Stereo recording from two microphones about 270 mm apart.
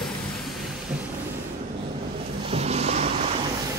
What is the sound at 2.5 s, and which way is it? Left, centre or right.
Vehicle, right.